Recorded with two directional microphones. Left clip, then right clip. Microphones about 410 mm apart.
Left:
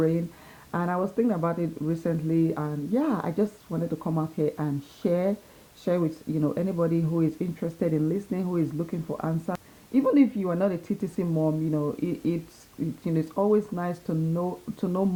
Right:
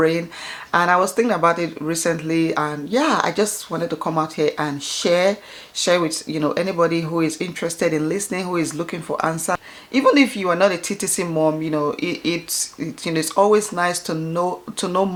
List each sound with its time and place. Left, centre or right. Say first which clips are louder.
0.0 s speech: right 8 dB; centre
11.3 s speech: right 8 dB; centre